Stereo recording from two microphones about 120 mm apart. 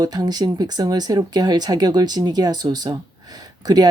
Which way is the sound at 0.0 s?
35° right (ahead or behind).